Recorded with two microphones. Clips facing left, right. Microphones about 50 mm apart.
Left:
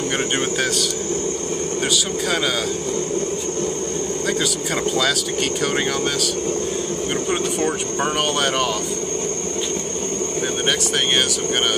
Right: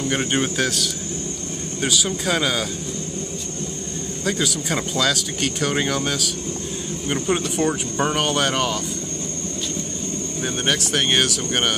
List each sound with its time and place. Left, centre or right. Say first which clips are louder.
1.8 s speech: right 2 dB; centre
4.9 s speech: left 2 dB; centre
10.7 s speech: right 1 dB; centre